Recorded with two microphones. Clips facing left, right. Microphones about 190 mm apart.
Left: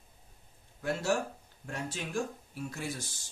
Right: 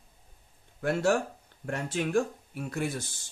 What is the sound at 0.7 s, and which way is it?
Speech, 60° right (ahead or behind).